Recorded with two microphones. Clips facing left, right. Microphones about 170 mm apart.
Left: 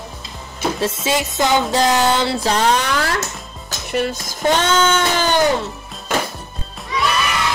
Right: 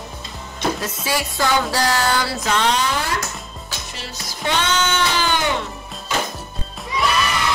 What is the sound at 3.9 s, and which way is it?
Music, 55° left (ahead or behind).